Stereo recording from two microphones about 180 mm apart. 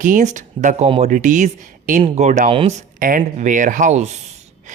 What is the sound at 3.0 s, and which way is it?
Speech, 45° right (ahead or behind).